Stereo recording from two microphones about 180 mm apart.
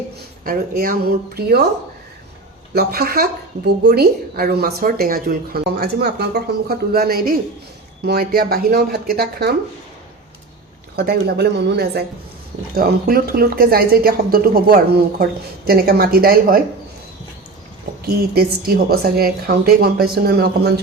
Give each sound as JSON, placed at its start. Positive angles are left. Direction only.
{"t": 0.4, "sound": "a woman's voice", "side_deg": -55}
{"t": 2.7, "sound": "a woman's voice", "side_deg": -60}
{"t": 10.9, "sound": "a woman's voice", "side_deg": -60}
{"t": 12.7, "sound": "a woman's voice", "side_deg": -55}
{"t": 18.0, "sound": "a woman's voice", "side_deg": -60}